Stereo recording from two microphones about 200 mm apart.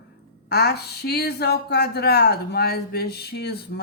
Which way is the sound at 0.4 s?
55° left (ahead or behind).